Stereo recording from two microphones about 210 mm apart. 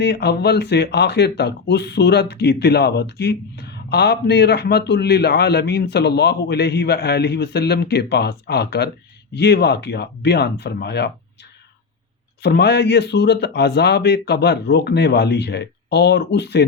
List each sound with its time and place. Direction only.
0.0 s speech: 55° left (ahead or behind)
12.4 s speech: 55° left (ahead or behind)